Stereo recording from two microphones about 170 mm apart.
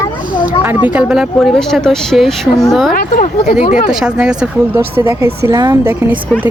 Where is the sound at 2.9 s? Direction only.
60° left (ahead or behind).